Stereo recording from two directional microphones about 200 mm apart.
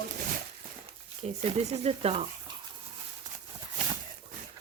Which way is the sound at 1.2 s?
30° right (ahead or behind).